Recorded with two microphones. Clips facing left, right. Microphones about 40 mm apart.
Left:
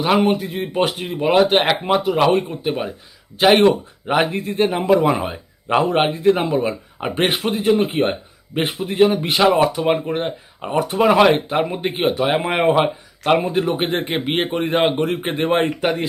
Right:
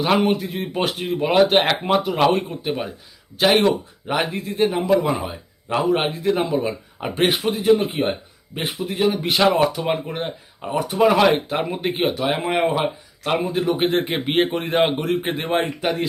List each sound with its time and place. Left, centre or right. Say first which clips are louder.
0.0 s speech: left 2 dB; centre
4.4 s a man's voice: left 2 dB; left
7.8 s speech: left 4 dB; left
8.8 s a man's voice: left 2 dB; left
9.3 s speech: left 2 dB; centre
12.1 s a man's voice: left 3 dB; left
13.6 s a man's voice: even; centre